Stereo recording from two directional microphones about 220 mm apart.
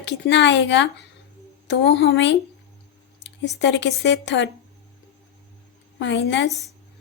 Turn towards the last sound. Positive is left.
turn(degrees=55)  # may be behind; listen again after turning